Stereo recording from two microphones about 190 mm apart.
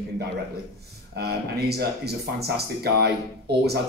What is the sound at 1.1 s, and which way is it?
Speech, 55° right (ahead or behind).